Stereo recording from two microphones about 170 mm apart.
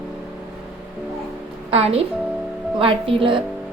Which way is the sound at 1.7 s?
35° right (ahead or behind).